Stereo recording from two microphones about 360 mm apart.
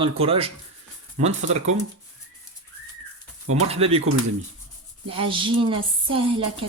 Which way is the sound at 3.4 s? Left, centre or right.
Right.